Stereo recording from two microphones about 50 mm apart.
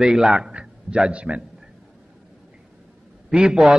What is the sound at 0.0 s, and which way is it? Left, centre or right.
A man's voice, centre.